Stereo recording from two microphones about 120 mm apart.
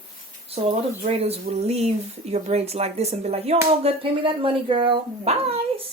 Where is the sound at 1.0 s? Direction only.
55° right (ahead or behind).